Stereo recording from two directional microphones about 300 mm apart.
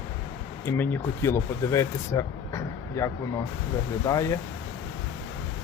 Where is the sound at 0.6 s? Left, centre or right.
Centre.